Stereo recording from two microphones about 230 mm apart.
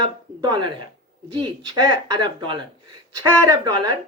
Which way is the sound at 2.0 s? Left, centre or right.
Right.